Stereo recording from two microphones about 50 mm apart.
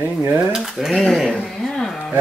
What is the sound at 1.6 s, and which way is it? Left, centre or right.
Speech, centre.